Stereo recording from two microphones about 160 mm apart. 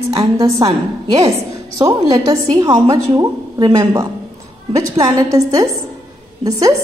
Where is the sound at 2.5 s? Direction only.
25° right (ahead or behind).